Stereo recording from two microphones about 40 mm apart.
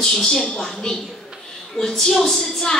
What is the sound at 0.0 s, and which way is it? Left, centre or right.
A woman's voice, centre.